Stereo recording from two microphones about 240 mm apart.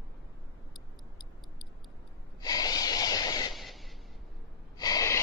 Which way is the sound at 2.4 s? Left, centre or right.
Centre.